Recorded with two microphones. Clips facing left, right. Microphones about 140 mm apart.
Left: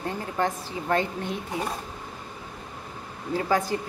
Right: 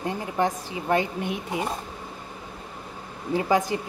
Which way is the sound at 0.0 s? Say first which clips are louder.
Right 2 dB; 15° right (ahead or behind).